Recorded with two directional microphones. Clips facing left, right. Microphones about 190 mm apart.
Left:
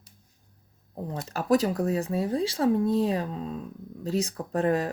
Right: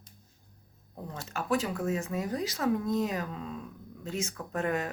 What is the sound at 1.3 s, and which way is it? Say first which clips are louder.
Speech: left 7 dB; 35° left (ahead or behind).